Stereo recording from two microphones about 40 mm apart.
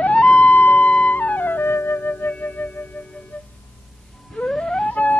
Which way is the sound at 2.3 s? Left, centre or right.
Left.